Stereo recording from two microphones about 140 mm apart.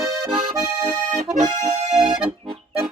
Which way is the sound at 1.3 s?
55° right (ahead or behind).